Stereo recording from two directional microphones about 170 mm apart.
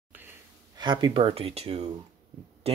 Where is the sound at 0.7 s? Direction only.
25° right (ahead or behind).